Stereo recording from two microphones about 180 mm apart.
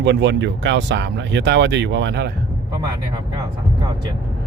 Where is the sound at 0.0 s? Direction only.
75° right (ahead or behind).